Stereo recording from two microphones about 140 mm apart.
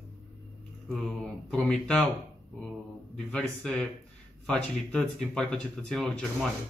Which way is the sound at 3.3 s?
5° left (ahead or behind).